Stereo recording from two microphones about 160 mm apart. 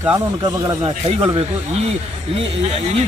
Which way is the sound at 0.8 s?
35° right (ahead or behind).